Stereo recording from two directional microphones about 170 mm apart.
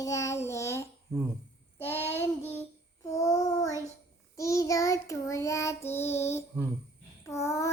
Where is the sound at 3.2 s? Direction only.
20° left (ahead or behind).